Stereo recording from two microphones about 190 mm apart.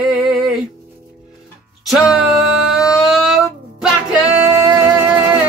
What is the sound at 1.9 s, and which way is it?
Music, centre (ahead or behind).